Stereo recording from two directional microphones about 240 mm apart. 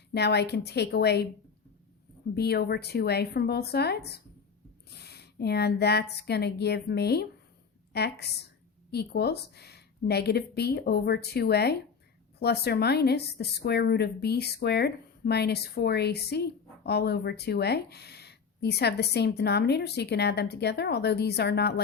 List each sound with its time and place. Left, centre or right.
0.1 s speech: left
2.3 s speech: left